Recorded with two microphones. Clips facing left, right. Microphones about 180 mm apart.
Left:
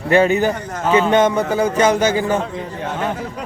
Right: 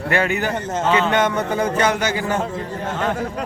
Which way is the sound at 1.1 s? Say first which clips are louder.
Left 4 dB; 20° left (ahead or behind).